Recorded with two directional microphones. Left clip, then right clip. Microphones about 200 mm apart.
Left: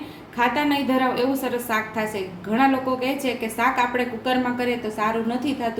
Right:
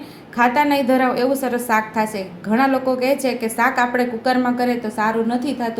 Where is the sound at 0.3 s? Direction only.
35° right (ahead or behind).